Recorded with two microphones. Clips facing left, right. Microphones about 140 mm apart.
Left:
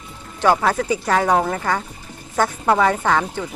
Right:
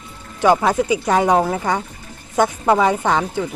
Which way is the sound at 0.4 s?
15° right (ahead or behind).